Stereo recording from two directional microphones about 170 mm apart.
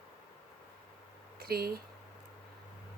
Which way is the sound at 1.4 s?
65° right (ahead or behind).